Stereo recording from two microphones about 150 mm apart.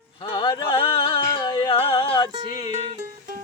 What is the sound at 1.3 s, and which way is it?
Music, 30° left (ahead or behind).